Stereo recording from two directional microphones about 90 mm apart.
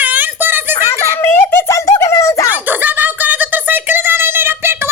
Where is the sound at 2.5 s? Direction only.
20° right (ahead or behind).